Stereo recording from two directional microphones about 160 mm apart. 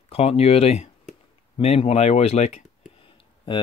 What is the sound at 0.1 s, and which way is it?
Speech, 40° left (ahead or behind).